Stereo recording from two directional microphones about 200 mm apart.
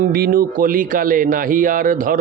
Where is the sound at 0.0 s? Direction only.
45° right (ahead or behind).